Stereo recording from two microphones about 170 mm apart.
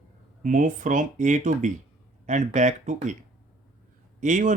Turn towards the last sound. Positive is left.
turn(degrees=-50)  # may be behind; listen again after turning